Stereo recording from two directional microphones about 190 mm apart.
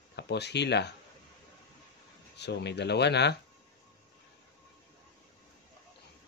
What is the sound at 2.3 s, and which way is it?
Speech, 65° left (ahead or behind).